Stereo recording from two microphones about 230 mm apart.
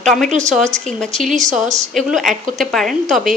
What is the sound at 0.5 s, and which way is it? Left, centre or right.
A woman's voice, centre.